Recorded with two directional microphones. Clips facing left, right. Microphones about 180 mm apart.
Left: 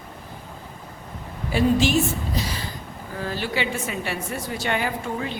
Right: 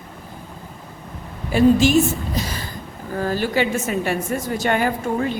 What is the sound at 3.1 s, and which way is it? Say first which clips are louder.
A woman's voice: right 6 dB; 45° right (ahead or behind).